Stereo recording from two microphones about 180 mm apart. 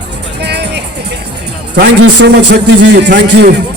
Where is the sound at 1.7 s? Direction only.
65° right (ahead or behind).